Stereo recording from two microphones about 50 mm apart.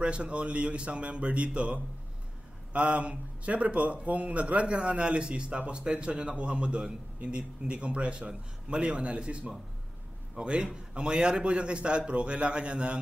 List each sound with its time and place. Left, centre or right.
0.0 s a man's voice: right